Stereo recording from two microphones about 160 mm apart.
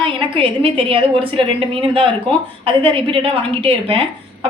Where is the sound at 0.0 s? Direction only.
35° right (ahead or behind).